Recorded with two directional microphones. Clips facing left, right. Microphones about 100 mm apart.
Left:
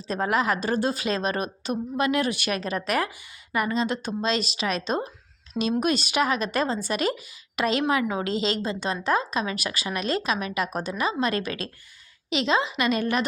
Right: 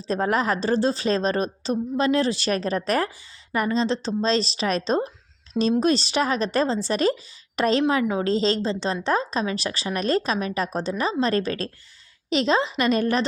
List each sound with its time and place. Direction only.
0.1 s speech: 35° right (ahead or behind)
3.8 s speech: 10° left (ahead or behind)
4.2 s speech: 30° right (ahead or behind)
10.7 s speech: 10° left (ahead or behind)
10.9 s speech: 35° right (ahead or behind)